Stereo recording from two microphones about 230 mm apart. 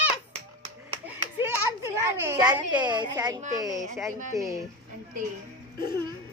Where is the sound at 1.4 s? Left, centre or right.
Centre.